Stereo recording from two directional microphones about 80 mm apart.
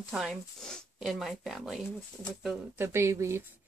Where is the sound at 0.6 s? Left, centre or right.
Centre.